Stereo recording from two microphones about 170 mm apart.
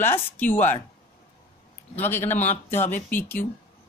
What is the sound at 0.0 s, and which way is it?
Speech, 10° left (ahead or behind).